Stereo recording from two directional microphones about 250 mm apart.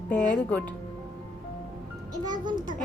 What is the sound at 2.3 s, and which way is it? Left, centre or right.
Speech, centre.